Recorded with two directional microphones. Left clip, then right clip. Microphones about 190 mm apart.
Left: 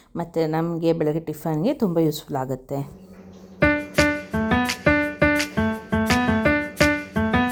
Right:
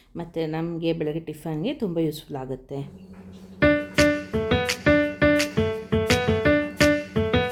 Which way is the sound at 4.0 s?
Centre (ahead or behind).